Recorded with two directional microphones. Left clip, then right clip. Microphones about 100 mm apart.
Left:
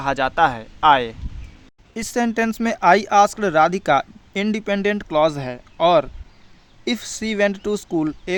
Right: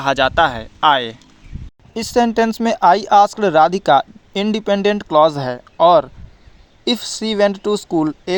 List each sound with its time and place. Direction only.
0.0 s speech: 50° right (ahead or behind)
1.9 s speech: 25° right (ahead or behind)